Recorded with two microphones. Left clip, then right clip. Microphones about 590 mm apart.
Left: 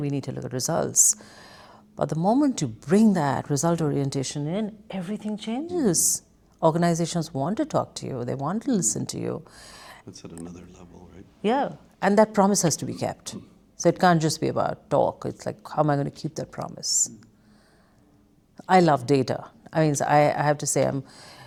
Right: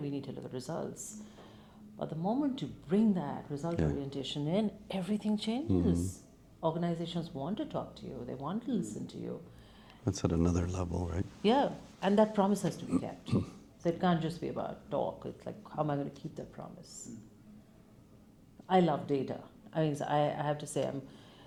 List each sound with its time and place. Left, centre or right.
0.0 s a woman's voice: left
2.0 s speech: left
4.4 s speech: left
6.6 s speech: left
10.1 s speech: right
11.4 s speech: left
11.9 s a woman's voice: left
18.6 s a woman's voice: left